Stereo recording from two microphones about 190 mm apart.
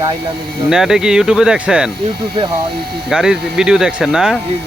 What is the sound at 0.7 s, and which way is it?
Speech, 5° right (ahead or behind).